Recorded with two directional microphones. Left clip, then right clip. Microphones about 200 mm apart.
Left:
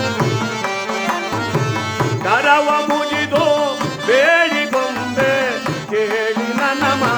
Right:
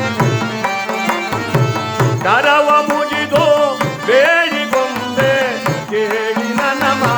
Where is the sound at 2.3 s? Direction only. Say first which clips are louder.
Right 2 dB; centre (ahead or behind).